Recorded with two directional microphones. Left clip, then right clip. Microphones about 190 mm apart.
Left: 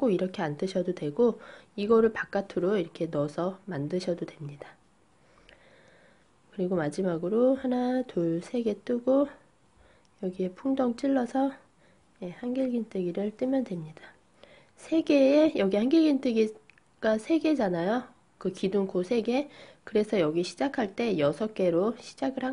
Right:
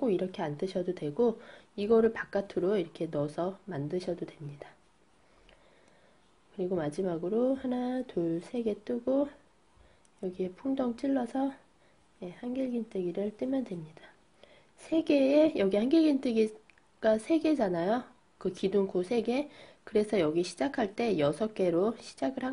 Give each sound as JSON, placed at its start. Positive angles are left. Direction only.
{"t": 0.0, "sound": "a woman's voice", "side_deg": 25}
{"t": 6.5, "sound": "a woman's voice", "side_deg": 25}